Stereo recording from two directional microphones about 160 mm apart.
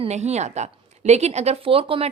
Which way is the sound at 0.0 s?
45° right (ahead or behind).